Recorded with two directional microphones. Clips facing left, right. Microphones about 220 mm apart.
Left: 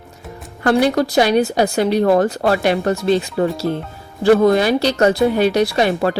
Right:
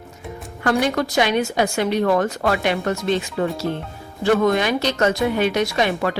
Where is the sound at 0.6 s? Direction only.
35° left (ahead or behind).